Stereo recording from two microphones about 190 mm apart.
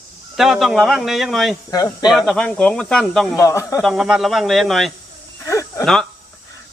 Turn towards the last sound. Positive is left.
turn(degrees=15)  # may be behind; listen again after turning